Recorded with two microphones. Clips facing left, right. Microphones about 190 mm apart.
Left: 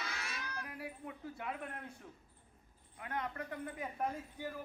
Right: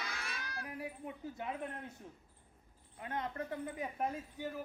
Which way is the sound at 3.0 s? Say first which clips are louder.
Right 1 dB; 25° right (ahead or behind).